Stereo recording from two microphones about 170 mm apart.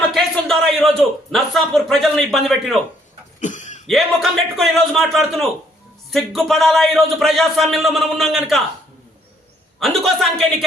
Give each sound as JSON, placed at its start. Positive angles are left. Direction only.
{"t": 0.1, "sound": "a man's voice", "side_deg": 0}
{"t": 3.4, "sound": "throat clearing", "side_deg": 45}
{"t": 3.8, "sound": "speech", "side_deg": 0}
{"t": 9.8, "sound": "speech", "side_deg": 0}